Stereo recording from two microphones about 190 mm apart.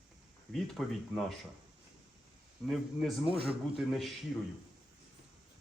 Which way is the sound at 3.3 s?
30° right (ahead or behind).